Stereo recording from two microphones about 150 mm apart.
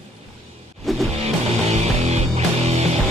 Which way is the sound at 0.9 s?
Centre (ahead or behind).